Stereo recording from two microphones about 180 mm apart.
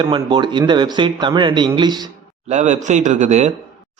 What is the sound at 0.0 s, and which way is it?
A man's voice, 25° right (ahead or behind).